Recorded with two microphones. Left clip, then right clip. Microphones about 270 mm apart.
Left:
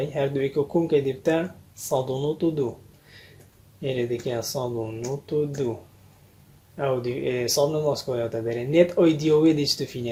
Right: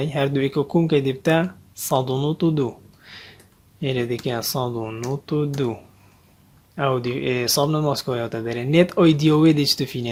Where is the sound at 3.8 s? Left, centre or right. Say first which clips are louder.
Right 2 dB; right.